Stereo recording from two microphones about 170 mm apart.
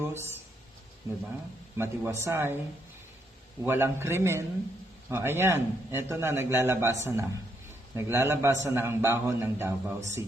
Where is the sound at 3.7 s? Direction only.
15° right (ahead or behind).